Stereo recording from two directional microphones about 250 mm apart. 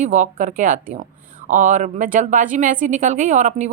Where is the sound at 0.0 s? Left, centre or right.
Right.